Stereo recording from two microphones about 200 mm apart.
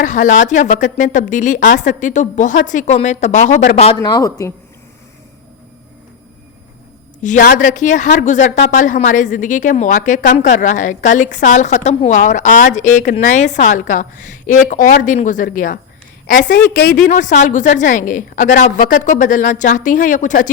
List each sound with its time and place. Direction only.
0.0 s a woman's voice: 40° left (ahead or behind)
4.0 s speech: 20° left (ahead or behind)
7.2 s a woman's voice: 40° left (ahead or behind)
16.7 s speech: 55° left (ahead or behind)
17.1 s a woman's voice: 35° left (ahead or behind)